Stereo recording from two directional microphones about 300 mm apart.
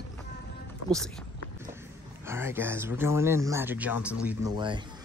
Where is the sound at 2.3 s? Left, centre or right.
Centre.